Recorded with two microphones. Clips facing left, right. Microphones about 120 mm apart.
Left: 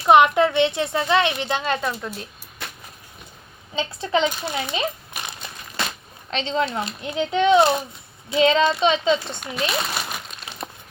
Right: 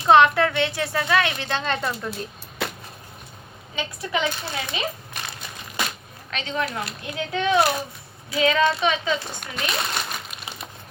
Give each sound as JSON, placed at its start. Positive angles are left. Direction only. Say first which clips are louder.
{"t": 0.0, "sound": "a woman's voice", "louder": "left 1 dB", "side_deg": 15}
{"t": 3.8, "sound": "speech", "louder": "left 5 dB", "side_deg": 25}
{"t": 6.3, "sound": "speech", "louder": "left 4 dB", "side_deg": 25}
{"t": 9.4, "sound": "speech", "louder": "left 3 dB", "side_deg": 5}
{"t": 10.6, "sound": "crumpling", "louder": "left 5 dB", "side_deg": 40}